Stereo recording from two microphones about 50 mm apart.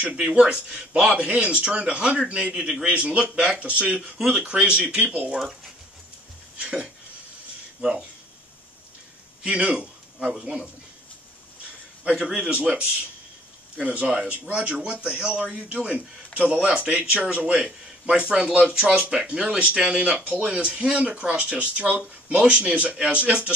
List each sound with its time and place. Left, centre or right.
0.2 s a man's voice: centre
1.2 s a man's voice: right
2.9 s speech: right
6.6 s speech: right
9.4 s speech: right
12.0 s a man's voice: right
17.2 s speech: right